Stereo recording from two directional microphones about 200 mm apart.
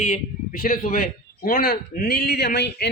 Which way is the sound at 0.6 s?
45° left (ahead or behind).